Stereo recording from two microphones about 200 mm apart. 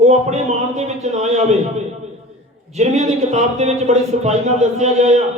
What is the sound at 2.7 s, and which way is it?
Speech, 35° right (ahead or behind).